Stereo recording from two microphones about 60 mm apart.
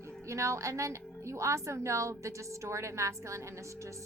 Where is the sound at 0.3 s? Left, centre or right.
Right.